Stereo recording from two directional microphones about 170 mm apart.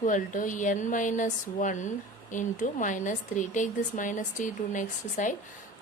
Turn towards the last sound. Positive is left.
turn(degrees=50)  # may be behind; listen again after turning